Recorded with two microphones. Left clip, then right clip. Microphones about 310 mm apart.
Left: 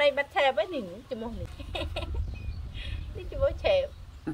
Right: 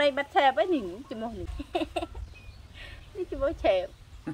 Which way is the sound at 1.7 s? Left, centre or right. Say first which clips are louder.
Right 5 dB; centre.